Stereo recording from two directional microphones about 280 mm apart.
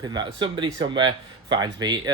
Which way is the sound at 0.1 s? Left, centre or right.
Centre.